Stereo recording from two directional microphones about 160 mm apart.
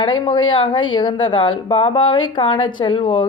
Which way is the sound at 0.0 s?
30° left (ahead or behind).